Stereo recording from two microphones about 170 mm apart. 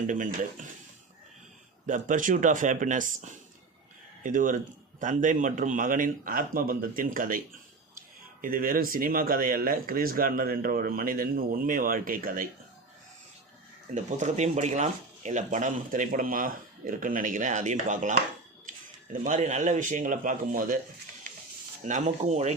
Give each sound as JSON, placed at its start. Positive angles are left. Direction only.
{"t": 0.1, "sound": "speech", "side_deg": -50}
{"t": 1.9, "sound": "speech", "side_deg": -50}
{"t": 13.9, "sound": "speech", "side_deg": -45}
{"t": 19.2, "sound": "speech", "side_deg": -45}
{"t": 21.8, "sound": "speech", "side_deg": -45}